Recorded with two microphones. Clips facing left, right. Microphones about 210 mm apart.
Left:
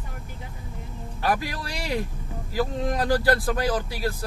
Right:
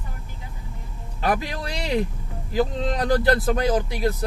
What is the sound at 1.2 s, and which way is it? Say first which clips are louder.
Speech: right 2 dB; 20° right (ahead or behind).